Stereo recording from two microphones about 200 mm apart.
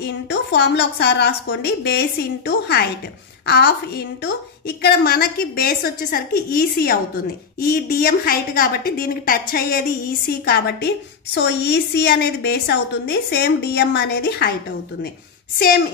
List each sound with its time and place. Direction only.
0.0 s a woman's voice: 60° left (ahead or behind)